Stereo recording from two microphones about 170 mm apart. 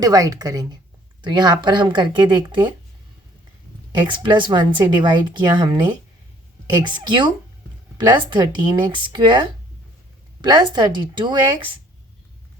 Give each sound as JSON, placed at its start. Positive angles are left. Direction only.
{"t": 0.0, "sound": "speech", "side_deg": -20}
{"t": 4.0, "sound": "speech", "side_deg": -30}